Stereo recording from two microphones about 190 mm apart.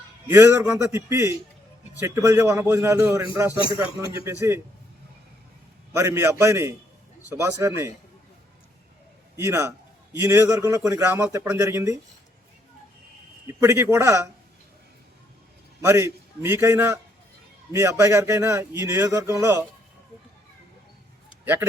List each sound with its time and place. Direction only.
0.3 s a man's voice: 15° right (ahead or behind)
5.9 s a man's voice: 15° right (ahead or behind)
9.3 s a man's voice: 15° right (ahead or behind)
13.5 s a man's voice: 15° right (ahead or behind)
15.8 s a man's voice: 15° right (ahead or behind)
21.4 s speech: 10° right (ahead or behind)